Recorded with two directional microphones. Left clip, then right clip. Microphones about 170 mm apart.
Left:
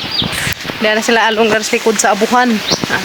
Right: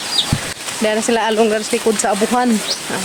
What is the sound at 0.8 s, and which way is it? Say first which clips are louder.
Speech: left 5 dB; 10° left (ahead or behind).